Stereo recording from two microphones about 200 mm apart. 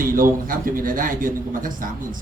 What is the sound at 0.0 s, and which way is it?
A man's voice, 45° right (ahead or behind).